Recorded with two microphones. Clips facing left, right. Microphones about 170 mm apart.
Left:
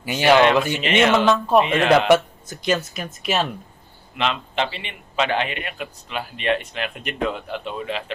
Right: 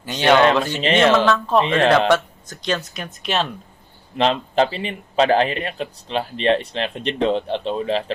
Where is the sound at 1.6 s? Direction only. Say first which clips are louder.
Right 3 dB; 30° right (ahead or behind).